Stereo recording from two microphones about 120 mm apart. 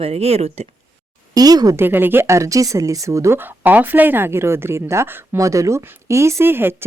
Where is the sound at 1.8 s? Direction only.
15° right (ahead or behind).